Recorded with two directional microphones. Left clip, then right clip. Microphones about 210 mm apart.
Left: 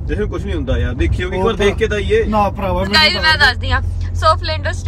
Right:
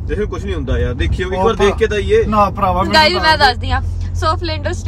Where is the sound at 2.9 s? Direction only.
30° right (ahead or behind).